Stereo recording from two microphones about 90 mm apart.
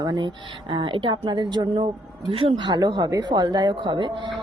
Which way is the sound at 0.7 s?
70° right (ahead or behind).